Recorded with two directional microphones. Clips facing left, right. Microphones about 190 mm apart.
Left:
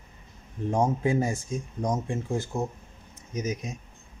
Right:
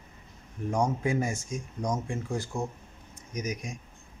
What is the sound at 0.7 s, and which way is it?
Speech, 30° left (ahead or behind).